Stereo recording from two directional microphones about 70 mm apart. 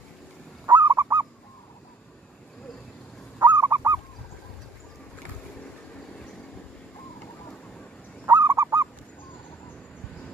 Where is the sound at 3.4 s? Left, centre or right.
Right.